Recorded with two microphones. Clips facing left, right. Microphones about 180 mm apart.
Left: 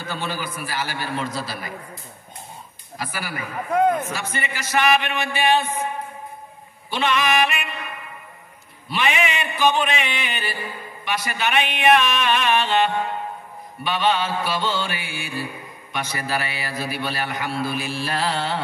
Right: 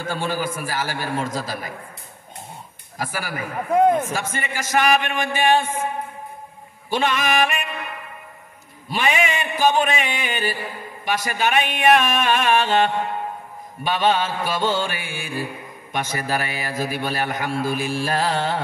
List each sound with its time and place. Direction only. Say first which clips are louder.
0.0 s a man's voice: right 4 dB; 45° right (ahead or behind)
3.0 s a man's voice: right 2 dB; 45° right (ahead or behind)
6.9 s a man's voice: even; 45° right (ahead or behind)
8.8 s a man's voice: right 1 dB; 45° right (ahead or behind)